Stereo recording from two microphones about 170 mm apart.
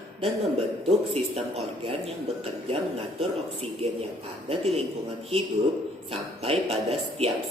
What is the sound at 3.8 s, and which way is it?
Speech, 35° right (ahead or behind).